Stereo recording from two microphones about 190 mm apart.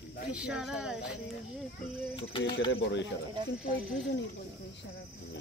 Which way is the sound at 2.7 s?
70° left (ahead or behind).